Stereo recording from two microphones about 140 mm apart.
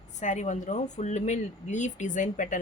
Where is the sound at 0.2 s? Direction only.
60° left (ahead or behind).